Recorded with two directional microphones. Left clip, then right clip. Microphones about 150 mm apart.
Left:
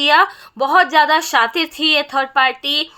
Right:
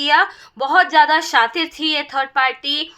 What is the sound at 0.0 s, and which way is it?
A woman's voice, 35° left (ahead or behind).